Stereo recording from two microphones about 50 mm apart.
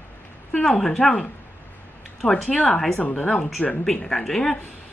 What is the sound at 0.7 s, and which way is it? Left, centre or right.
Speech, centre.